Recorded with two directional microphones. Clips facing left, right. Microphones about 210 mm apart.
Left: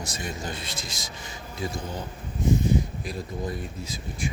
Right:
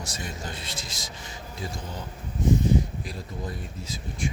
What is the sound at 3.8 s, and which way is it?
Speech, 10° left (ahead or behind).